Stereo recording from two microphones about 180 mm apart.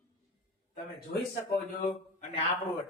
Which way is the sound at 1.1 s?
75° left (ahead or behind).